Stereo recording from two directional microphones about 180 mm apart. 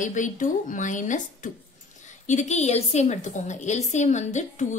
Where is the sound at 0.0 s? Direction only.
45° left (ahead or behind).